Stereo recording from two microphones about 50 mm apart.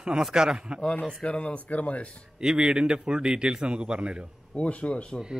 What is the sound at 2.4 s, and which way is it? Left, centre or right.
A man's voice, centre.